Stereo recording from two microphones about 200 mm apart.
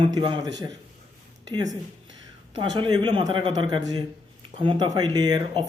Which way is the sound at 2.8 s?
20° right (ahead or behind).